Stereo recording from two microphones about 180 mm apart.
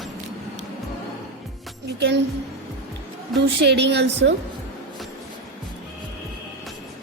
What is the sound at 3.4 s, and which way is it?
Speech, 70° right (ahead or behind).